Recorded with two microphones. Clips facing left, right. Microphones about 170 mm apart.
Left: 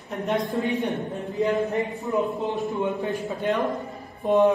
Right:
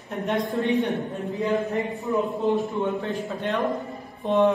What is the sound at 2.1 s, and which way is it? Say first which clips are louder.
Speech: right 3 dB; 20° left (ahead or behind).